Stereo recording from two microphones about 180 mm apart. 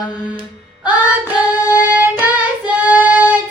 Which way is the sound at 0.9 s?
5° right (ahead or behind).